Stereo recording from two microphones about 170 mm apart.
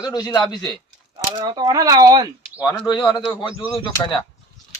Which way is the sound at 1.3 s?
25° right (ahead or behind).